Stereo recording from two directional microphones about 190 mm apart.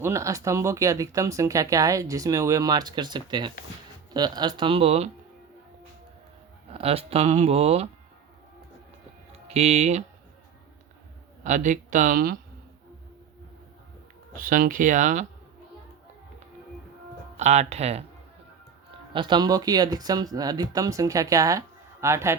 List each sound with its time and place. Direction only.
0.0 s speech: 15° right (ahead or behind); by 5.1 s 35° right (ahead or behind)
6.7 s speech: 30° right (ahead or behind)
9.5 s speech: 35° right (ahead or behind)
11.4 s speech: 40° right (ahead or behind)
14.3 s speech: 45° right (ahead or behind)
17.3 s speech: 35° right (ahead or behind)
19.1 s speech: 25° right (ahead or behind)